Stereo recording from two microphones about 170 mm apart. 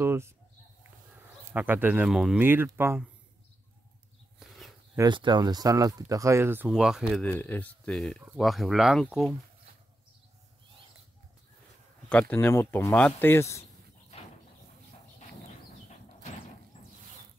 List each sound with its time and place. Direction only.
0.0 s speech: 15° right (ahead or behind)
1.5 s speech: 10° right (ahead or behind)
2.4 s speech: 10° right (ahead or behind)
4.4 s a sound: centre (ahead or behind)
4.9 s speech: 25° right (ahead or behind); by 7.2 s 5° right (ahead or behind)
7.2 s speech: 10° left (ahead or behind)
12.1 s speech: 10° left (ahead or behind)